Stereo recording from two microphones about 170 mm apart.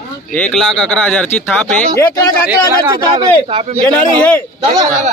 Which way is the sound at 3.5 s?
30° right (ahead or behind).